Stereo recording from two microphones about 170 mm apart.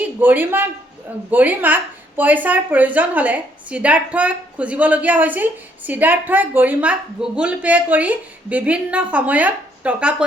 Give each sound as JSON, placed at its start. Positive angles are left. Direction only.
{"t": 0.0, "sound": "a woman's voice", "side_deg": -10}